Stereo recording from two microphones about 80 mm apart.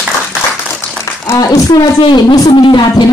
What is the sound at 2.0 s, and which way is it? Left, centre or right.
Speech, left.